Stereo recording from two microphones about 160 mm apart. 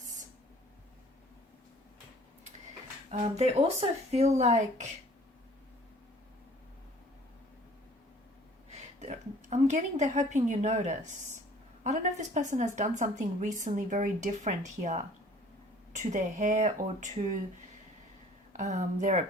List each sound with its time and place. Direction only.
3.1 s speech: 40° right (ahead or behind)
8.7 s a sound: 45° right (ahead or behind)
11.8 s speech: 50° right (ahead or behind)
18.5 s speech: 50° right (ahead or behind)